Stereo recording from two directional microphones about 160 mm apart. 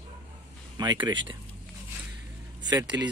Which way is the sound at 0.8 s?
25° right (ahead or behind).